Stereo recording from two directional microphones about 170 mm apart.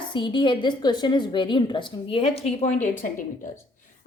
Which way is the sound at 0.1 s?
30° left (ahead or behind).